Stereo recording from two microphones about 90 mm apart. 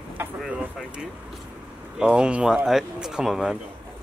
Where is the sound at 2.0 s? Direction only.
10° right (ahead or behind).